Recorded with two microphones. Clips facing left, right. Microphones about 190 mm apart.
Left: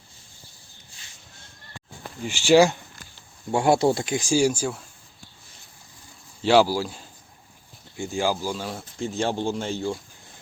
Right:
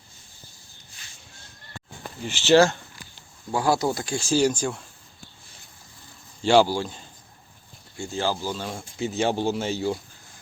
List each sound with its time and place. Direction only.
2.2 s speech: 10° left (ahead or behind)
3.5 s speech: 25° left (ahead or behind); by 4.8 s 10° left (ahead or behind)
6.4 s speech: centre (ahead or behind)
7.9 s speech: 15° left (ahead or behind)
8.8 s speech: 5° right (ahead or behind)